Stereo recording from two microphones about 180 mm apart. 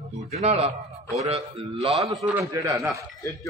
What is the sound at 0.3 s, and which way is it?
Speech, 35° right (ahead or behind).